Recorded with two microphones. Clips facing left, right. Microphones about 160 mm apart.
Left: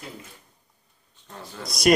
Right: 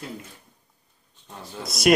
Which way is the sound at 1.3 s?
Centre (ahead or behind).